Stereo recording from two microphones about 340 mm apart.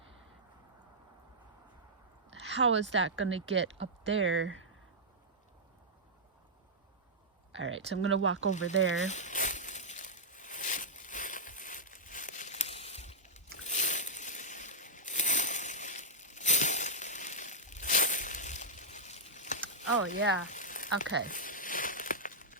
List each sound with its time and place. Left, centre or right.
2.4 s speech: right
7.5 s speech: right
8.4 s speech: left
9.0 s a sound: left
19.9 s speech: right
20.5 s a sound: left